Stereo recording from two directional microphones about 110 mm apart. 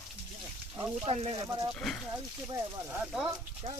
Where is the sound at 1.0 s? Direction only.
60° right (ahead or behind).